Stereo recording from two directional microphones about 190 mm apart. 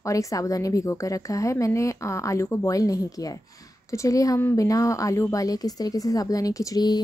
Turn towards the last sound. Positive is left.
turn(degrees=20)  # may be behind; listen again after turning